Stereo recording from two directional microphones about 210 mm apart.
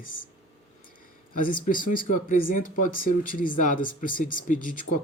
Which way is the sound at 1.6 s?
40° left (ahead or behind).